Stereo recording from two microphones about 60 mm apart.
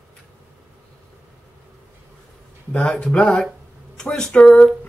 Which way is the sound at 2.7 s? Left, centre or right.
Centre.